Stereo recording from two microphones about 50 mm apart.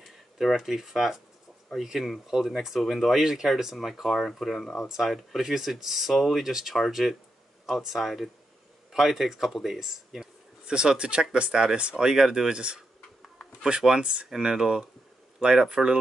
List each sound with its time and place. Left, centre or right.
0.0 s a sound: centre
0.6 s speech: centre
10.6 s speech: centre